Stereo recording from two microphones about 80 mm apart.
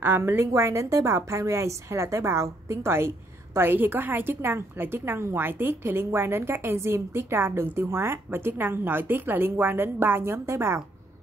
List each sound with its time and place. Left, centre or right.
0.0 s a woman's voice: right